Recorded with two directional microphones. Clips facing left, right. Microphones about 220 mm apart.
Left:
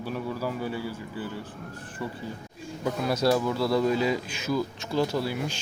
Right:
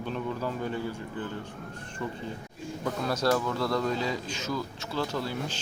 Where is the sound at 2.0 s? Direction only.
10° left (ahead or behind).